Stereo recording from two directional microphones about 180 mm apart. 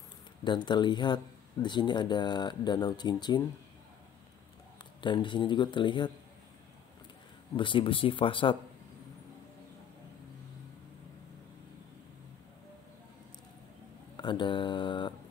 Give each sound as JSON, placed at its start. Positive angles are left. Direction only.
{"t": 0.4, "sound": "speech", "side_deg": 25}
{"t": 5.0, "sound": "speech", "side_deg": 25}
{"t": 7.5, "sound": "speech", "side_deg": 25}
{"t": 14.1, "sound": "mantra", "side_deg": 25}